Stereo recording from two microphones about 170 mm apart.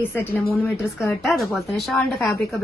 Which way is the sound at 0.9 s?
Centre (ahead or behind).